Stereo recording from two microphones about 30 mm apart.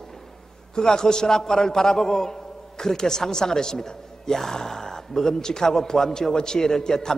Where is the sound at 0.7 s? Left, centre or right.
Left.